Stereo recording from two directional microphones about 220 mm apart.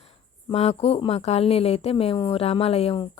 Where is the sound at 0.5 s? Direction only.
30° left (ahead or behind).